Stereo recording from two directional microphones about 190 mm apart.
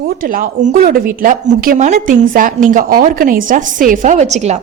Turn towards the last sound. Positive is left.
turn(degrees=-35)  # may be behind; listen again after turning